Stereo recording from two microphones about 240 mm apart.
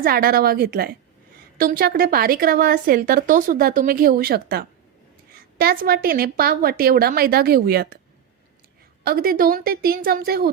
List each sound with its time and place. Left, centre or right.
0.0 s a woman's voice: right
9.0 s a woman's voice: right